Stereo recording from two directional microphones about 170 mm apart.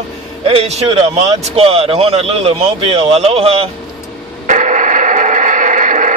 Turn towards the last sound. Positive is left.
turn(degrees=-50)  # may be behind; listen again after turning